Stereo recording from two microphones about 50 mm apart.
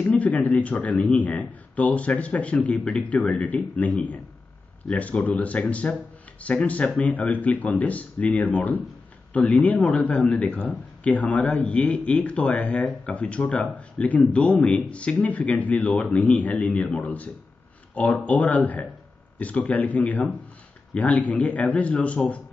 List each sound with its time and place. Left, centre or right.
0.0 s speech: left
4.9 s speech: left